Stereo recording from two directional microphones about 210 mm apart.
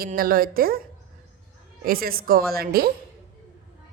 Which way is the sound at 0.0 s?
45° right (ahead or behind).